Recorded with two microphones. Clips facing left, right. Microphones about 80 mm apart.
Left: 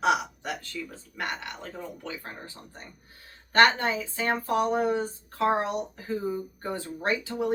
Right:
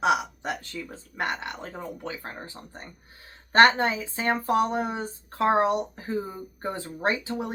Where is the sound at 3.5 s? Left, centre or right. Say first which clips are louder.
Right 3 dB; right.